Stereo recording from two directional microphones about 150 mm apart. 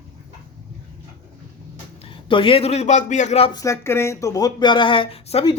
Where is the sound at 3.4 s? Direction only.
25° left (ahead or behind).